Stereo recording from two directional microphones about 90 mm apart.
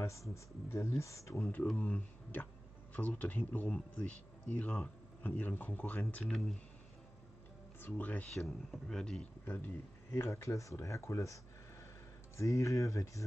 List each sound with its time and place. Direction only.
0.0 s speech: 35° left (ahead or behind)
1.5 s speech: 20° left (ahead or behind)
7.8 s speech: 20° left (ahead or behind)
8.4 s speech: 5° left (ahead or behind)
10.1 s speech: 30° left (ahead or behind)
12.4 s speech: 35° left (ahead or behind)